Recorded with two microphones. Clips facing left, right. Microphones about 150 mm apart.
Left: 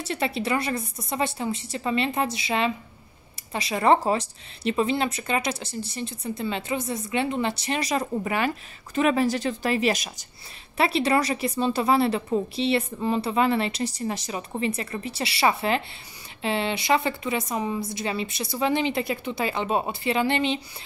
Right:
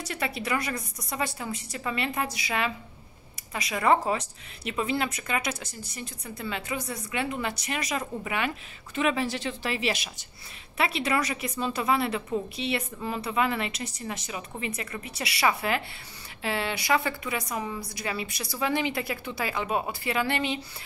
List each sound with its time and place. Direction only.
0.0 s a woman's voice: 25° left (ahead or behind)